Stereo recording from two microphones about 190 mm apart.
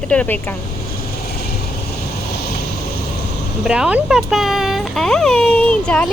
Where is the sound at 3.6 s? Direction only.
5° right (ahead or behind).